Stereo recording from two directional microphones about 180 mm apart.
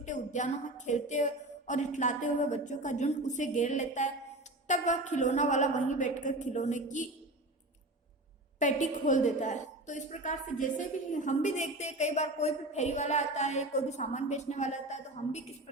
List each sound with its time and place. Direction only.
0.0 s a woman's voice: 45° left (ahead or behind)
8.5 s a woman's voice: 45° left (ahead or behind)